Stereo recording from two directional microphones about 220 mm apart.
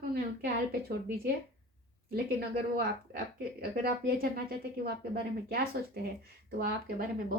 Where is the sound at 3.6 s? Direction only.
45° right (ahead or behind).